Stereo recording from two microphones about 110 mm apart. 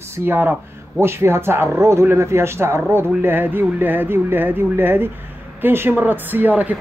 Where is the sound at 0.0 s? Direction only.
20° right (ahead or behind).